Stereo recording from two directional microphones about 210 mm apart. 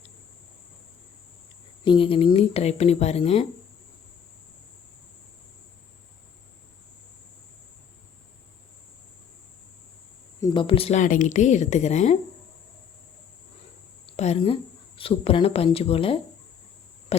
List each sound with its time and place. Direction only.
1.8 s speech: 25° left (ahead or behind)
10.4 s a woman's voice: 25° left (ahead or behind)
14.1 s speech: 30° left (ahead or behind)
17.1 s a sound: 30° left (ahead or behind)